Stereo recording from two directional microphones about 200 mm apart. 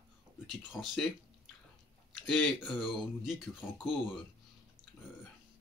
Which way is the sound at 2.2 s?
Centre (ahead or behind).